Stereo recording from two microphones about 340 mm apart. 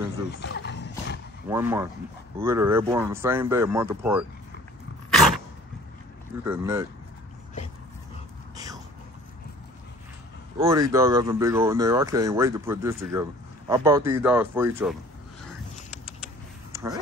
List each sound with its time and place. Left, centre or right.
0.4 s a sound: left
1.5 s speech: centre
5.1 s dog: centre
6.4 s speech: centre
10.6 s speech: centre
16.7 s a sound: centre